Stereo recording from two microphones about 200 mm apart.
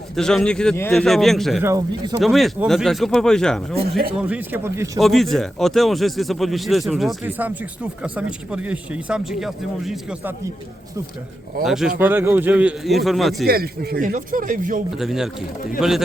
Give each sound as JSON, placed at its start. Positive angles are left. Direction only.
{"t": 0.2, "sound": "speech", "side_deg": 5}
{"t": 1.6, "sound": "speech", "side_deg": -20}
{"t": 2.2, "sound": "speech", "side_deg": 0}
{"t": 4.2, "sound": "speech", "side_deg": -10}
{"t": 4.9, "sound": "speech", "side_deg": 0}
{"t": 11.6, "sound": "speech", "side_deg": 0}
{"t": 13.5, "sound": "speech", "side_deg": -50}
{"t": 14.9, "sound": "speech", "side_deg": 0}